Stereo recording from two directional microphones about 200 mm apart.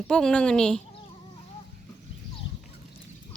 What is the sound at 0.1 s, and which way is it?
Speech, 5° left (ahead or behind).